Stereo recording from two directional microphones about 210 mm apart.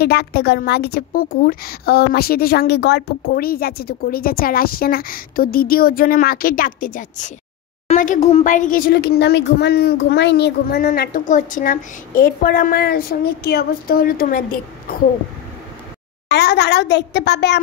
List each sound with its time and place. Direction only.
0.0 s a woman's voice: 50° left (ahead or behind)
16.3 s a woman's voice: 50° left (ahead or behind)